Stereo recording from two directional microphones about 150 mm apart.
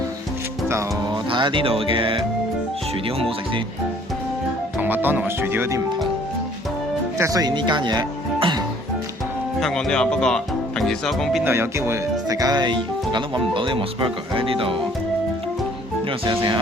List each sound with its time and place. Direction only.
1.1 s speech: 30° right (ahead or behind)
4.8 s speech: 10° right (ahead or behind)
7.2 s speech: 25° right (ahead or behind)
9.6 s speech: centre (ahead or behind)
11.4 s speech: 15° right (ahead or behind); by 14.8 s 35° right (ahead or behind)
16.2 s speech: 30° right (ahead or behind)